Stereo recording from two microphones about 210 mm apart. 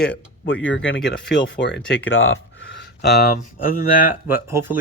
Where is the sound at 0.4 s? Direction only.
65° left (ahead or behind); by 3.3 s 50° left (ahead or behind).